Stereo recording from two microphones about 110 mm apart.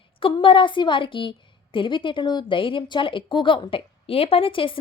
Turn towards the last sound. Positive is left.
turn(degrees=50)  # may be behind; listen again after turning